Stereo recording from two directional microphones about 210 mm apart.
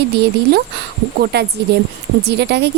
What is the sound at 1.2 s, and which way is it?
Speech, 50° right (ahead or behind).